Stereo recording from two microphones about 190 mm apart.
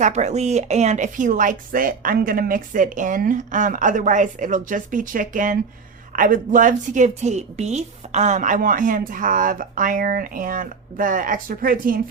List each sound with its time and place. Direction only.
0.0 s a woman's voice: 40° right (ahead or behind)